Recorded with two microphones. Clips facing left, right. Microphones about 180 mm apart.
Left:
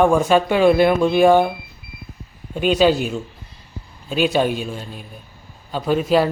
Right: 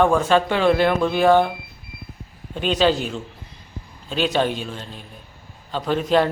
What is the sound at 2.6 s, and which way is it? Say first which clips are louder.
A man's voice: left 3 dB; 10° left (ahead or behind).